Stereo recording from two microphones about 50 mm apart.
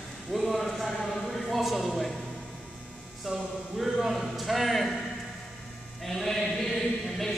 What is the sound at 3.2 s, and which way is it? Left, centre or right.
Speech, centre.